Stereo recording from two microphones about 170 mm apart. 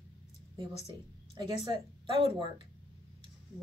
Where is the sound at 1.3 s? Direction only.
25° right (ahead or behind).